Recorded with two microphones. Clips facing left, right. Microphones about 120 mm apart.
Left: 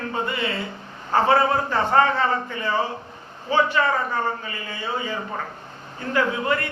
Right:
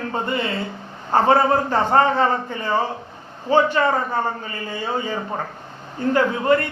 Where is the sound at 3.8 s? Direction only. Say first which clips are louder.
Right 2 dB; 40° right (ahead or behind).